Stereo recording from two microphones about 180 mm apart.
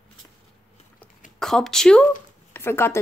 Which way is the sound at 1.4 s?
Centre (ahead or behind).